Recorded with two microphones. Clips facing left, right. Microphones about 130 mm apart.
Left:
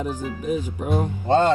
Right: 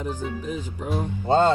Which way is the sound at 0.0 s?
15° left (ahead or behind).